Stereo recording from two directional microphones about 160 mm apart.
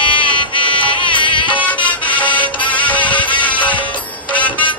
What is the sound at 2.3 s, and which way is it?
Music, 30° left (ahead or behind).